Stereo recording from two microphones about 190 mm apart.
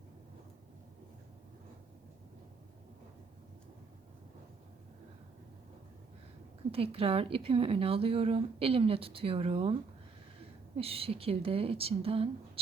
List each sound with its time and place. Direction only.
6.7 s speech: 30° right (ahead or behind)
10.8 s a woman's voice: 30° right (ahead or behind)